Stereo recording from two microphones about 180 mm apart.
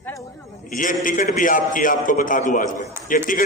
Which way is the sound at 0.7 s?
50° left (ahead or behind).